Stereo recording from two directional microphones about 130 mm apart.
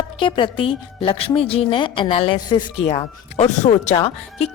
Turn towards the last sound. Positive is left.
turn(degrees=50)  # may be behind; listen again after turning